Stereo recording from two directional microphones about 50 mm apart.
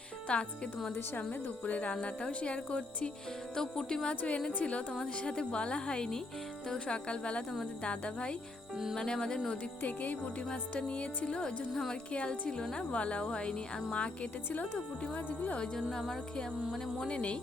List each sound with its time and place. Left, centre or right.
0.3 s a woman's voice: left
1.3 s a woman's voice: left; by 4.1 s centre
4.1 s a woman's voice: left
8.7 s cricket: centre
9.0 s speech: centre
9.8 s a woman's voice: left
11.7 s a woman's voice: centre
12.1 s a woman's voice: left
15.9 s speech: centre
17.1 s a woman's voice: left